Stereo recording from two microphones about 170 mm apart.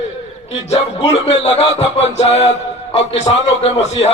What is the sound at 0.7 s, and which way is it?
A man's voice, 40° left (ahead or behind).